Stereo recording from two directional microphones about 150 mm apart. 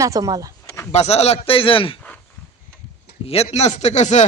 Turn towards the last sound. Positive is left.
turn(degrees=50)  # may be behind; listen again after turning